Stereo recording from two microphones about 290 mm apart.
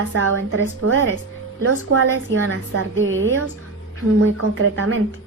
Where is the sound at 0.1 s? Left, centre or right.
Right.